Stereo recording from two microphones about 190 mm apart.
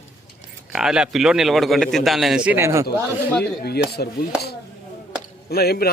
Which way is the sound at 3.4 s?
55° left (ahead or behind).